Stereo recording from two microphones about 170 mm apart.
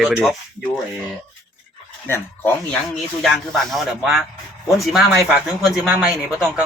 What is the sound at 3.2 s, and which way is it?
Speech, centre (ahead or behind).